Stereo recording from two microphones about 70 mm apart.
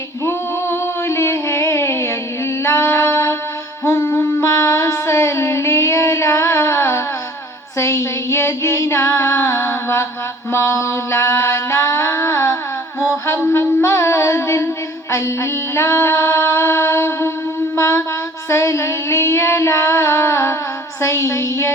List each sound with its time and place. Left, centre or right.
0.3 s a sound: left
2.6 s female singing: left
3.8 s child singing: left
7.8 s female singing: left
10.5 s a sound: left
13.1 s music: left
17.7 s mantra: left
18.4 s child singing: left